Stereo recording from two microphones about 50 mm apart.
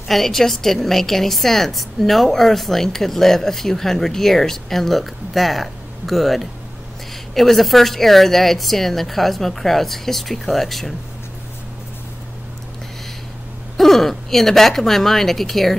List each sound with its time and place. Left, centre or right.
0.1 s a woman's voice: centre
13.7 s a woman's voice: centre